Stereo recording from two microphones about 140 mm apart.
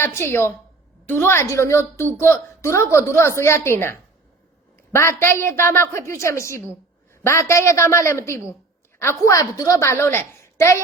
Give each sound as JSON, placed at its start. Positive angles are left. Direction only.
{"t": 0.0, "sound": "a woman's voice", "side_deg": 20}